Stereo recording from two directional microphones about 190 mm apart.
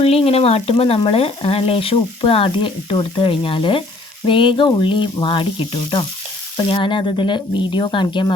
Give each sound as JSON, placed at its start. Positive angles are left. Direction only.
{"t": 0.0, "sound": "frying", "side_deg": 30}